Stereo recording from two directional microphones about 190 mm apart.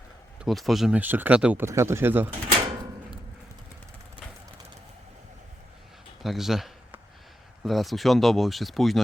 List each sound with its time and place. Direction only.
0.3 s speech: centre (ahead or behind)
6.2 s a sound: centre (ahead or behind)
7.6 s speech: centre (ahead or behind)